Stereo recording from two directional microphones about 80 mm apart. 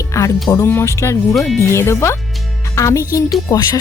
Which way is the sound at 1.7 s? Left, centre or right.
Left.